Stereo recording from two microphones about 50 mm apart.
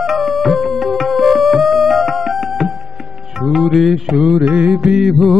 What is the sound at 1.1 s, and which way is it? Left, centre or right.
Music, centre.